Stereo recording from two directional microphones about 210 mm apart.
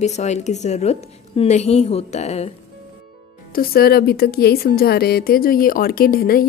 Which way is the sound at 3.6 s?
45° left (ahead or behind).